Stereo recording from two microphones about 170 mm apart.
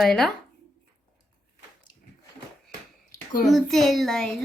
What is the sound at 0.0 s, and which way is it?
Speech, centre (ahead or behind).